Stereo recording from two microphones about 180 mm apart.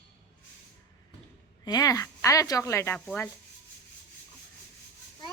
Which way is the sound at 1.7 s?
20° left (ahead or behind).